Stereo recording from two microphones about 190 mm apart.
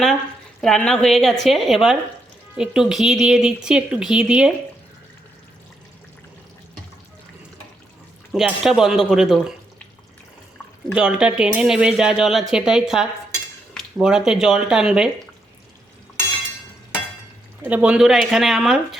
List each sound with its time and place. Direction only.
0.6 s speech: 5° left (ahead or behind)
8.3 s speech: centre (ahead or behind)
10.9 s speech: 5° right (ahead or behind)
17.6 s speech: 10° right (ahead or behind)